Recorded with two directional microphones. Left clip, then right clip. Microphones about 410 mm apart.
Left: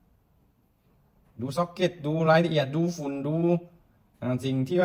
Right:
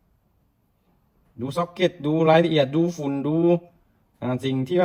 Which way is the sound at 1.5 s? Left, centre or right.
Centre.